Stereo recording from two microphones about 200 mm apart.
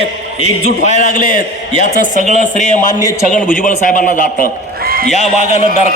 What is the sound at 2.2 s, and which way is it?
Speech, 35° right (ahead or behind).